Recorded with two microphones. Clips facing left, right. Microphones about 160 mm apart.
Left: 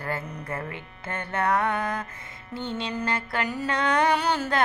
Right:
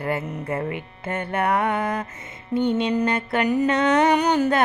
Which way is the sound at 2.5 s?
20° right (ahead or behind).